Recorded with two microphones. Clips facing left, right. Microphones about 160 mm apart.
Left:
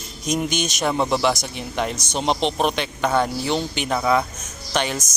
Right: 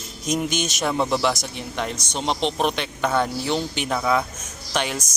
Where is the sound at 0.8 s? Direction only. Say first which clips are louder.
Left 2 dB; 5° left (ahead or behind).